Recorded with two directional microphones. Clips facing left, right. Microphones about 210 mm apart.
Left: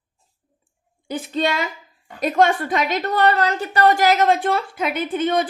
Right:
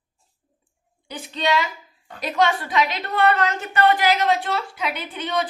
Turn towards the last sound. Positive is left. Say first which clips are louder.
# left 6 dB
turn(degrees=50)  # may be behind; listen again after turning